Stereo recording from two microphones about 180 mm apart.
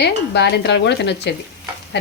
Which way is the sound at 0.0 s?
70° left (ahead or behind).